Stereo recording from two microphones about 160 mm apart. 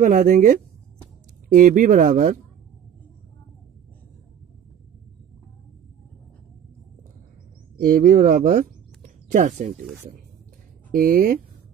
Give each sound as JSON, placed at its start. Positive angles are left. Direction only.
{"t": 0.0, "sound": "speech", "side_deg": -55}
{"t": 7.7, "sound": "speech", "side_deg": -60}
{"t": 10.9, "sound": "speech", "side_deg": -65}